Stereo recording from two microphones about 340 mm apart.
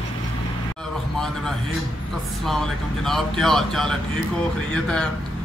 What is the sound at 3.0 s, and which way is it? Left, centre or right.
Speech, centre.